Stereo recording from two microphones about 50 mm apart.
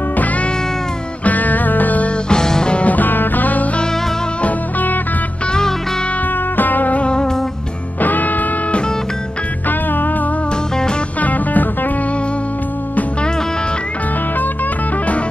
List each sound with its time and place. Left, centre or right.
0.1 s music: left
2.2 s music: centre; by 5.0 s left
5.5 s music: centre
6.5 s music: left; by 7.4 s centre
8.0 s music: left
9.7 s music: left